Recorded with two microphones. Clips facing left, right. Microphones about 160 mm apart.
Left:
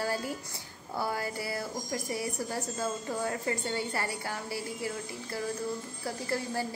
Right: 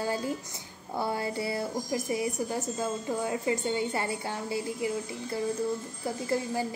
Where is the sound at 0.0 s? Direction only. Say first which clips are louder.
Right 2 dB; 20° right (ahead or behind).